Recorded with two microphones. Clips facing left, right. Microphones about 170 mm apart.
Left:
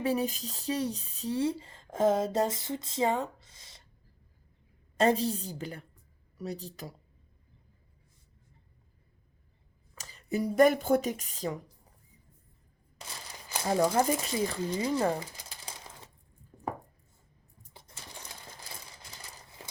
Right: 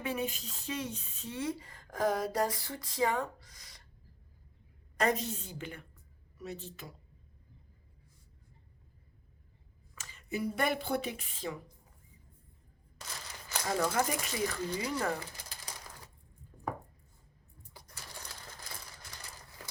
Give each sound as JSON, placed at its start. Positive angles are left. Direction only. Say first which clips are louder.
{"t": 0.0, "sound": "speech", "louder": "left 6 dB", "side_deg": 35}
{"t": 4.9, "sound": "a woman's voice", "louder": "left 5 dB", "side_deg": 30}
{"t": 9.9, "sound": "speech", "louder": "left 5 dB", "side_deg": 35}
{"t": 13.7, "sound": "speech", "louder": "left 6 dB", "side_deg": 30}
{"t": 17.7, "sound": "sewing machine", "louder": "left 1 dB", "side_deg": 25}